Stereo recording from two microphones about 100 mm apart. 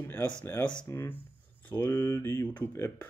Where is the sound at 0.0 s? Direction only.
20° left (ahead or behind).